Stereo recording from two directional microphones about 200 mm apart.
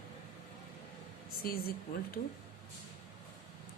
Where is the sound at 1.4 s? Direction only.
50° left (ahead or behind).